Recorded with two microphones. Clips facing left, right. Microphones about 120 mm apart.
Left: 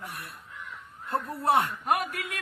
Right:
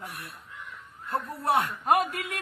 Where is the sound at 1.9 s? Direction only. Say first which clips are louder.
Right 6 dB; 25° right (ahead or behind).